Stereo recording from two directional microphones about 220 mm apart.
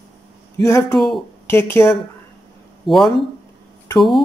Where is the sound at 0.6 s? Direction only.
15° left (ahead or behind).